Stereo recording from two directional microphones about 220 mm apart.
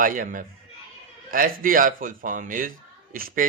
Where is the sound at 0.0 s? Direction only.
35° right (ahead or behind).